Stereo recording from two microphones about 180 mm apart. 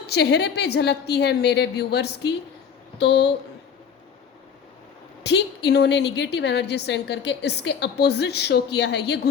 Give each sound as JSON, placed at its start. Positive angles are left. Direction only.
{"t": 0.1, "sound": "a woman's voice", "side_deg": 70}
{"t": 5.2, "sound": "a woman's voice", "side_deg": 70}